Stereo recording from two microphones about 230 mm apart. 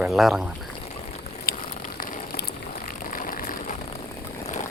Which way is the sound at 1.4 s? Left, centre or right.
Left.